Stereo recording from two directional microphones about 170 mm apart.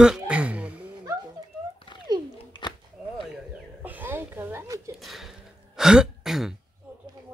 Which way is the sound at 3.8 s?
10° right (ahead or behind).